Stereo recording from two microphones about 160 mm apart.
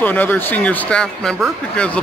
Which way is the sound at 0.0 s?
10° left (ahead or behind).